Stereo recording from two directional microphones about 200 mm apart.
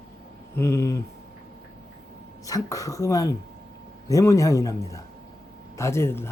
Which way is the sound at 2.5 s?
15° left (ahead or behind).